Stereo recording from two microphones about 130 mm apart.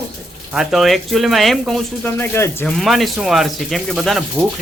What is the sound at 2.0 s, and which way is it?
Speech, 15° left (ahead or behind).